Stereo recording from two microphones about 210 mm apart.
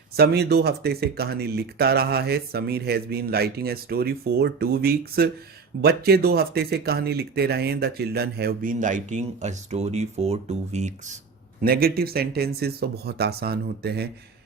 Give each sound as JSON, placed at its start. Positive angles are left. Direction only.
{"t": 0.2, "sound": "speech", "side_deg": -50}
{"t": 11.6, "sound": "speech", "side_deg": -45}